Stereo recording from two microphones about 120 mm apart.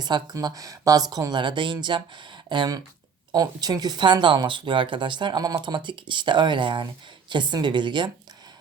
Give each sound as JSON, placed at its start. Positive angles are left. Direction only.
{"t": 0.0, "sound": "speech", "side_deg": -35}